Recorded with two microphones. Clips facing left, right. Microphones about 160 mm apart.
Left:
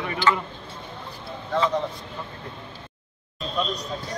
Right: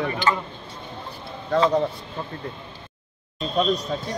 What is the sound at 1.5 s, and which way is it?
Speech, 35° right (ahead or behind).